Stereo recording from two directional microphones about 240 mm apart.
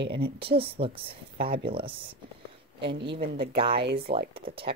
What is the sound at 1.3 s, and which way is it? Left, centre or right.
Speech, right.